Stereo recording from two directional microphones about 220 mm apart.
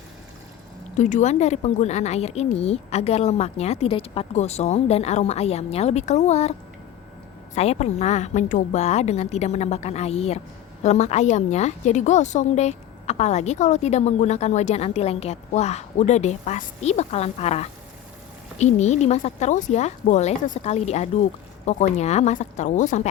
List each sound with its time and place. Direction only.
0.9 s a woman's voice: 35° left (ahead or behind)
7.5 s a woman's voice: 30° left (ahead or behind)